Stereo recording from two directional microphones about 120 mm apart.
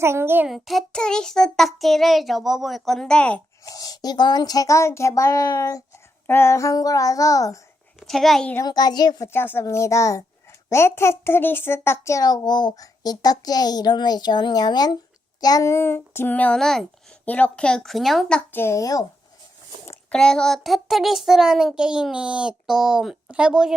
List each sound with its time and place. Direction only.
0.0 s a child's voice: 20° right (ahead or behind)
0.4 s a child's voice: centre (ahead or behind)
3.6 s speech: 30° left (ahead or behind)
7.9 s a child's voice: centre (ahead or behind)
8.6 s speech: 35° left (ahead or behind)
9.2 s a child's voice: 20° left (ahead or behind)
18.6 s speech: 25° left (ahead or behind)
20.1 s a child's voice: 5° left (ahead or behind)